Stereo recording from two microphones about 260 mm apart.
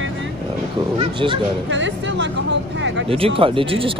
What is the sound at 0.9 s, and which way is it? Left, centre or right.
Speech, centre.